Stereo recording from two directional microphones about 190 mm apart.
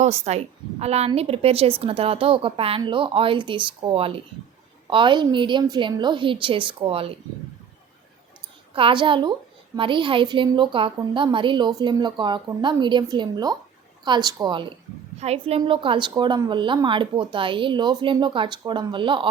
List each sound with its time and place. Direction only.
0.0 s a woman's voice: 35° right (ahead or behind)
8.7 s a woman's voice: 25° right (ahead or behind)